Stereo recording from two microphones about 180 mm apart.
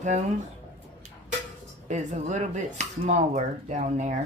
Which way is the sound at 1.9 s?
40° right (ahead or behind).